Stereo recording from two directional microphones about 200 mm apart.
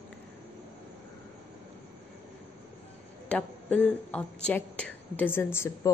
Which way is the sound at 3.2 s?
5° left (ahead or behind).